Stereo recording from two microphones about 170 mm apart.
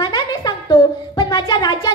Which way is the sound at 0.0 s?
25° left (ahead or behind).